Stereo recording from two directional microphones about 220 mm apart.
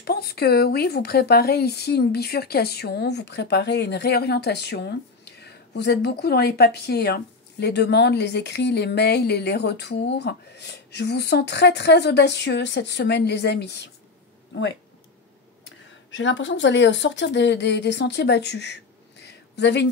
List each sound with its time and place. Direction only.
0.0 s speech: 45° left (ahead or behind)
16.1 s speech: 60° left (ahead or behind)
19.2 s a sound: 50° left (ahead or behind)